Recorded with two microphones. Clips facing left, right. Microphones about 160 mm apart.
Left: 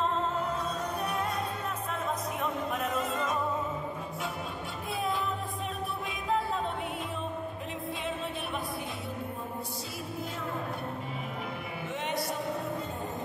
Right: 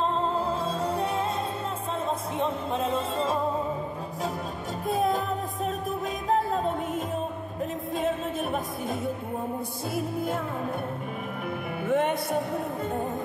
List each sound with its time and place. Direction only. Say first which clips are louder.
0.3 s music: right 4 dB; 30° right (ahead or behind)
2.4 s music: right 5 dB; 30° right (ahead or behind)
4.8 s music: right 8 dB; 45° right (ahead or behind)
6.2 s music: right 5 dB; 40° right (ahead or behind)
9.9 s music: right 11 dB; 55° right (ahead or behind)
11.9 s music: right 9 dB; 50° right (ahead or behind)